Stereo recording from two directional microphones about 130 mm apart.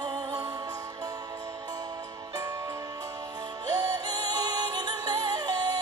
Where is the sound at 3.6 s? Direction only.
30° right (ahead or behind).